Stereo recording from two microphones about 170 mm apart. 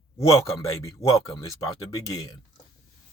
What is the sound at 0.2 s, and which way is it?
Speech, 20° left (ahead or behind).